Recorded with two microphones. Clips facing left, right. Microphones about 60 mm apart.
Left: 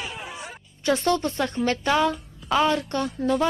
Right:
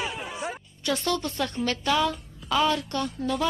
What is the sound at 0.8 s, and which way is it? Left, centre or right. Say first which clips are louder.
A woman's voice: left 5 dB; left.